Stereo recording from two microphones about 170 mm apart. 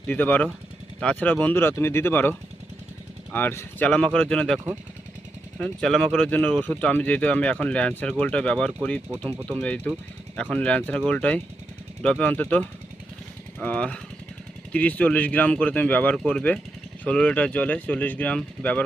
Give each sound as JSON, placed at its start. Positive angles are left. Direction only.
{"t": 0.1, "sound": "speech", "side_deg": 10}
{"t": 3.3, "sound": "speech", "side_deg": 15}